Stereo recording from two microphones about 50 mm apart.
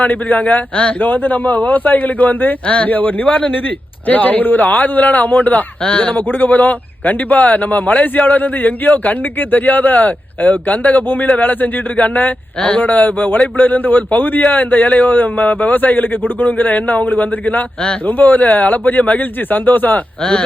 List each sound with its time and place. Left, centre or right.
0.0 s a man's voice: left
5.8 s a man's voice: centre
6.1 s a man's voice: left